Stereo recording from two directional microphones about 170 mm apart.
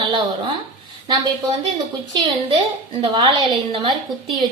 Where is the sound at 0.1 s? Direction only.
30° right (ahead or behind).